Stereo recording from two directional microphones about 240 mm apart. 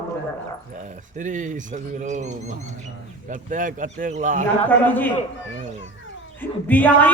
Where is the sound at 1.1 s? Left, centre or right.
Right.